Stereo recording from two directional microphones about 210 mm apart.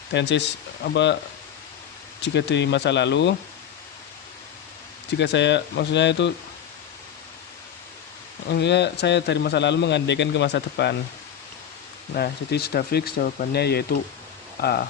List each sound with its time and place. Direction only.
0.1 s a man's voice: 55° left (ahead or behind)
2.2 s a man's voice: 55° left (ahead or behind)
5.1 s a man's voice: 55° left (ahead or behind)
8.4 s a man's voice: 55° left (ahead or behind)
12.1 s speech: 50° left (ahead or behind)